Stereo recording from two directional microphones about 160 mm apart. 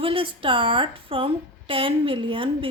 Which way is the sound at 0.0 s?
35° right (ahead or behind).